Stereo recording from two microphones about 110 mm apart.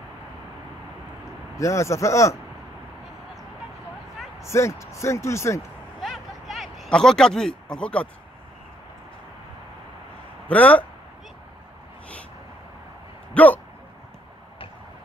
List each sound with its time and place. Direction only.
1.6 s speech: 25° left (ahead or behind)
4.5 s speech: 25° left (ahead or behind)
5.9 s a sound: centre (ahead or behind)
10.5 s speech: 15° left (ahead or behind)
13.3 s speech: 15° left (ahead or behind)